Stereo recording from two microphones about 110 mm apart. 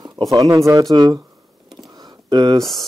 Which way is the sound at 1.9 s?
40° right (ahead or behind).